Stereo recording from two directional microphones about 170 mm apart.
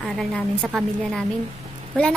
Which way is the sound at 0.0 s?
Centre (ahead or behind).